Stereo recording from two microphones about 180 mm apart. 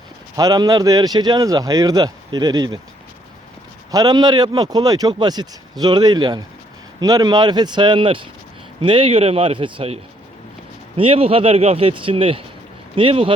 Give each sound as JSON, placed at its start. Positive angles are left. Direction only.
{"t": 0.3, "sound": "speech", "side_deg": -20}
{"t": 3.9, "sound": "speech", "side_deg": -20}